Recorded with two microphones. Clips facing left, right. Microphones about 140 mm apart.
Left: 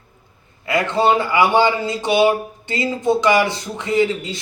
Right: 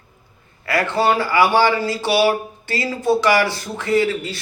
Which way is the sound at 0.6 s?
20° left (ahead or behind).